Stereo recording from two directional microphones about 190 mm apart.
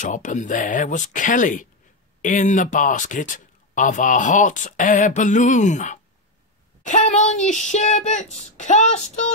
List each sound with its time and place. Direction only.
0.0 s speech: 40° left (ahead or behind)